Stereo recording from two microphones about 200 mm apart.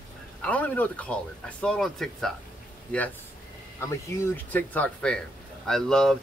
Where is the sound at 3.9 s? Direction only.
15° left (ahead or behind).